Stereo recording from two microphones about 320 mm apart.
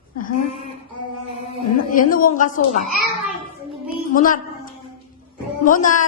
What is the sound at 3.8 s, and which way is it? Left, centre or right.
Music, left.